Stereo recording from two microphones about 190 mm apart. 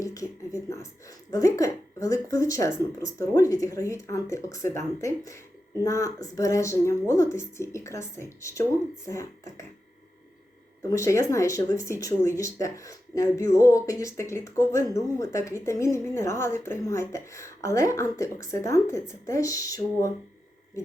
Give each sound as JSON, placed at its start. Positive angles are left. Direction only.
{"t": 0.0, "sound": "speech", "side_deg": 15}
{"t": 10.8, "sound": "speech", "side_deg": 15}